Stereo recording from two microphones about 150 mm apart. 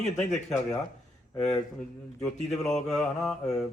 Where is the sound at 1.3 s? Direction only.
45° left (ahead or behind).